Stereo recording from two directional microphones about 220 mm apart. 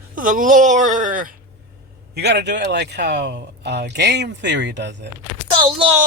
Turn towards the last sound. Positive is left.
turn(degrees=-20)  # may be behind; listen again after turning